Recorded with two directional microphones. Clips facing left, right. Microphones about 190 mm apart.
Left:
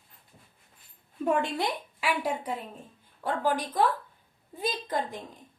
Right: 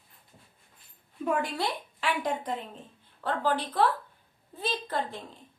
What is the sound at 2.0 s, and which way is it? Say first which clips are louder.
A woman's voice: even; 10° left (ahead or behind).